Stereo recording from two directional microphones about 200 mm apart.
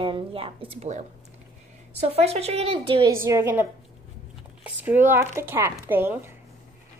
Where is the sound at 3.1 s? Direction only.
15° right (ahead or behind).